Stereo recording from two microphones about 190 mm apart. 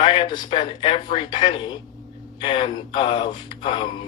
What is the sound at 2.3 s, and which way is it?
Speech, 25° left (ahead or behind).